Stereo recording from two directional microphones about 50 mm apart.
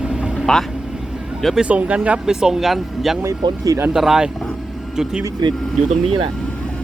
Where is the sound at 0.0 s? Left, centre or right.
Centre.